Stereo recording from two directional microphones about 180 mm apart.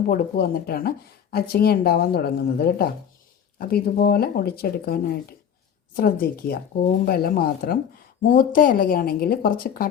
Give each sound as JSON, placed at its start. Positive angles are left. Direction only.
{"t": 0.1, "sound": "a woman's voice", "side_deg": 55}